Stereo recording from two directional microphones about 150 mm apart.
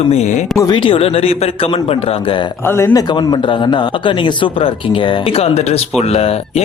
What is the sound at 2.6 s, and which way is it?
A man's voice, 15° left (ahead or behind).